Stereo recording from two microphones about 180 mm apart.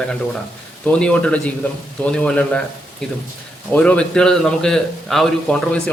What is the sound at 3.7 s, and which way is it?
A man's voice, 5° left (ahead or behind).